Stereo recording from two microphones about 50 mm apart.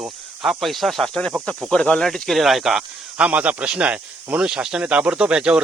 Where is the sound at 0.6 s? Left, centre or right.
Centre.